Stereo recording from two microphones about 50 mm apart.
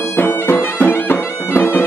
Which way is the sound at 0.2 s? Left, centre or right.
Left.